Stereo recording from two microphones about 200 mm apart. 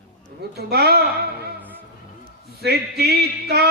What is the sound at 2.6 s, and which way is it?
Speech, 50° right (ahead or behind).